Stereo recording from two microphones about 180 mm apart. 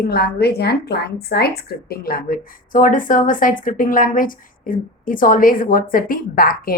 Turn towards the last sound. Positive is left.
turn(degrees=55)  # may be behind; listen again after turning